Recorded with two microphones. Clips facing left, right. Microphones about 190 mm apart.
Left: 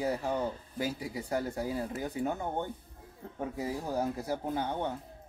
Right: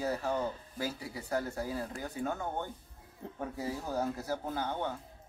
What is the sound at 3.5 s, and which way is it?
Speech, 15° left (ahead or behind).